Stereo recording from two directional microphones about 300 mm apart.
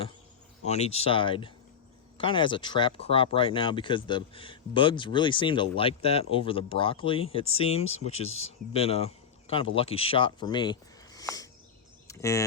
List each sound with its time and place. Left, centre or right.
0.6 s speech: left
8.3 s speech: left
8.7 s speech: centre